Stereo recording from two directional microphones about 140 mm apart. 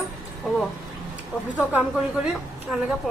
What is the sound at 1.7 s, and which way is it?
Speech, 10° right (ahead or behind).